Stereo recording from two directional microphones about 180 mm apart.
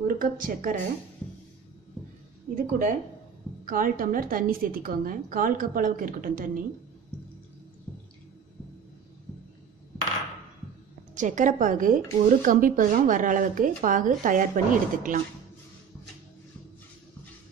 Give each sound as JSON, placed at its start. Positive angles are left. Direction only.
{"t": 0.0, "sound": "a woman's voice", "side_deg": -50}
{"t": 2.5, "sound": "a woman's voice", "side_deg": -45}
{"t": 11.1, "sound": "a woman's voice", "side_deg": -45}